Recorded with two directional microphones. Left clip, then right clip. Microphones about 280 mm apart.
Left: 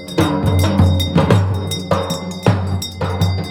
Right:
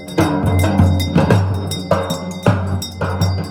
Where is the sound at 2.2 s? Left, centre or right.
Left.